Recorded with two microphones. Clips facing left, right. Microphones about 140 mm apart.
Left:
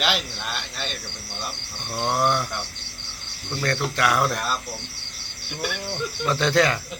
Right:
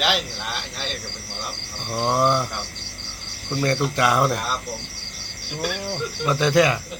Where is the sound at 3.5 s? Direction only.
15° right (ahead or behind).